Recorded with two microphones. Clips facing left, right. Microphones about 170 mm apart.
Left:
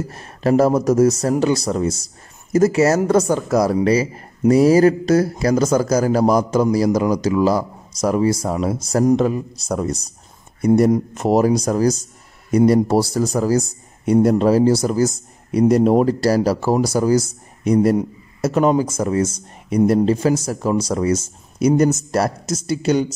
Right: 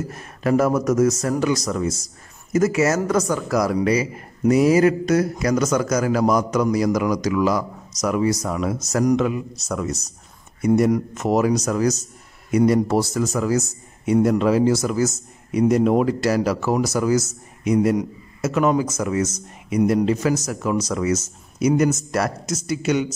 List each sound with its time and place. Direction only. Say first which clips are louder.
0.1 s a man's voice: left 3 dB; 30° left (ahead or behind)